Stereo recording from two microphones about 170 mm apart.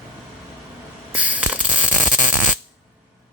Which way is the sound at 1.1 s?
10° right (ahead or behind).